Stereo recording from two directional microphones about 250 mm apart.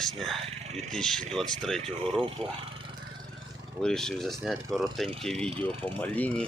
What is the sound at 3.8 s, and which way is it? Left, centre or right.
Speech, centre.